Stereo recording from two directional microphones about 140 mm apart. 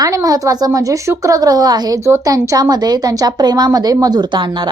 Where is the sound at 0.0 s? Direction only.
25° right (ahead or behind).